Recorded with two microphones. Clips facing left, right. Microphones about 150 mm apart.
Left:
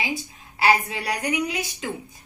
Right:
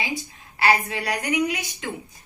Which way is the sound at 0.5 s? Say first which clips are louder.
Left 1 dB; 15° left (ahead or behind).